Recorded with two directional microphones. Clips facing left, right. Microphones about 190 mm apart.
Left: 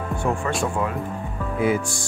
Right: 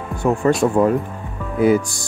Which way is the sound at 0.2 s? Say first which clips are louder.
Right 9 dB; 40° right (ahead or behind).